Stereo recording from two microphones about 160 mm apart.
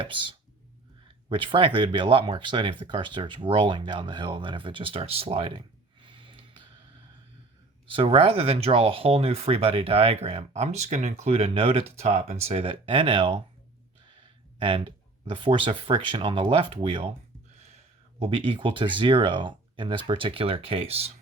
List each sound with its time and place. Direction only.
0.0 s speech: 30° right (ahead or behind)
7.9 s speech: 35° right (ahead or behind)
14.6 s speech: 35° right (ahead or behind)
18.2 s speech: 30° right (ahead or behind)